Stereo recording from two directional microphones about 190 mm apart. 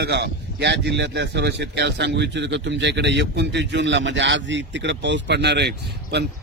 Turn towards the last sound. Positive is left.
turn(degrees=-60)  # may be behind; listen again after turning